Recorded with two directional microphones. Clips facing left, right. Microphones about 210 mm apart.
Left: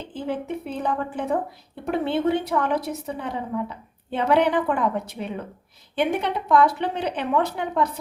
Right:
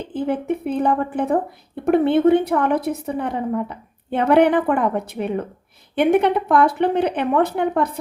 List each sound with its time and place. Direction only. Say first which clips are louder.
0.1 s a woman's voice: right 6 dB; 55° right (ahead or behind)